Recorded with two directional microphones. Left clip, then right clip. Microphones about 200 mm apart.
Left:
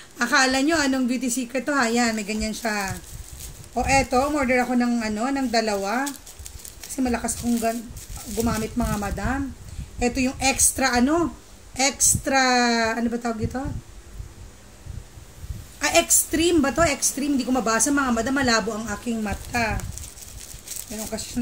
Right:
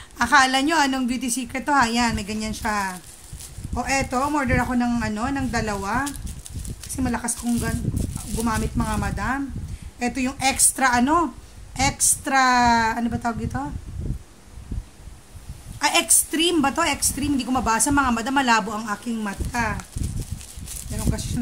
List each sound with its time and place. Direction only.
0.2 s a woman's voice: 35° right (ahead or behind)
7.0 s a woman's voice: 35° right (ahead or behind)
15.8 s a woman's voice: 35° right (ahead or behind)